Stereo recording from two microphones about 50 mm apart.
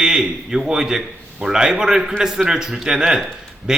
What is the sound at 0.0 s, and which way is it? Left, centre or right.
A man's voice, centre.